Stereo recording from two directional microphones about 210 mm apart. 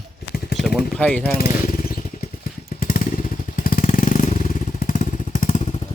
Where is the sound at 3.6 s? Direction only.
40° left (ahead or behind).